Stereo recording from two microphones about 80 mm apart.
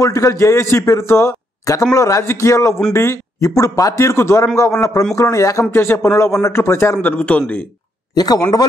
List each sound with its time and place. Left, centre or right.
0.0 s a man's voice: left
5.7 s a man's voice: left
7.2 s a man's voice: centre
8.1 s a man's voice: left